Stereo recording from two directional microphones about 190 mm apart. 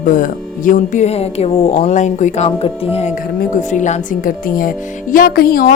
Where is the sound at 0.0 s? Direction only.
45° left (ahead or behind).